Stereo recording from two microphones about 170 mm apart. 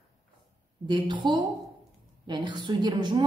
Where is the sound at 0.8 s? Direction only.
25° right (ahead or behind).